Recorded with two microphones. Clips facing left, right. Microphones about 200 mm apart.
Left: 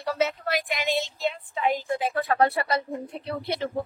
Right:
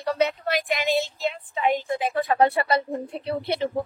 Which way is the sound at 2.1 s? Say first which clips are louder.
Right 3 dB; 15° right (ahead or behind).